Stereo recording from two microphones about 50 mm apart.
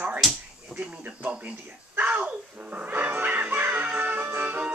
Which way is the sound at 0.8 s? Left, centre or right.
Right.